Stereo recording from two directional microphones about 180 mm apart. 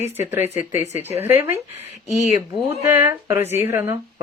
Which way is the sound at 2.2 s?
40° left (ahead or behind).